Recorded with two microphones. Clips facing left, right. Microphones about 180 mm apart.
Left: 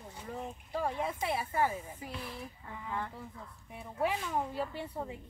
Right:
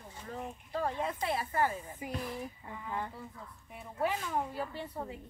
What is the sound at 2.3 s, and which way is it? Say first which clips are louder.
Speech: right 3 dB; 15° right (ahead or behind).